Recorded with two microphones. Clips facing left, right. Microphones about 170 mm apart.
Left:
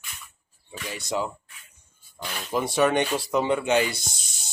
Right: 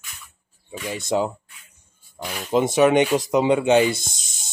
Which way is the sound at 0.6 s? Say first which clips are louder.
Right 6 dB; 20° right (ahead or behind).